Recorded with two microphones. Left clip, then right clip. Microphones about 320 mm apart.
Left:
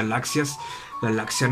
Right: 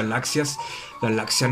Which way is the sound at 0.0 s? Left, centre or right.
Centre.